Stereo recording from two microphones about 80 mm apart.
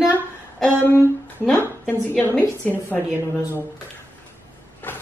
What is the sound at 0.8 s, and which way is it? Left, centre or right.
A woman's voice, left.